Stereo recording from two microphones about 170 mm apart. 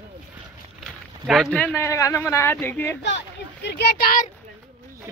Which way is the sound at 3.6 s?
90° left.